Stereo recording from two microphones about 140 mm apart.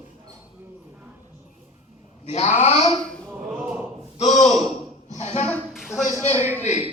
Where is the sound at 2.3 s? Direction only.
50° left (ahead or behind).